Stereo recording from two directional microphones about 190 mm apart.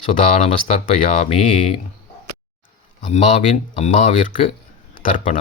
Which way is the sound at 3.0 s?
40° left (ahead or behind).